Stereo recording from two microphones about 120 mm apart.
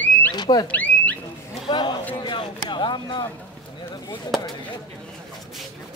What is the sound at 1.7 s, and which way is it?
A man's voice, 40° left (ahead or behind).